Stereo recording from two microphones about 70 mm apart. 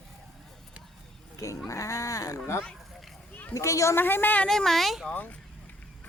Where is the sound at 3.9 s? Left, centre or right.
Left.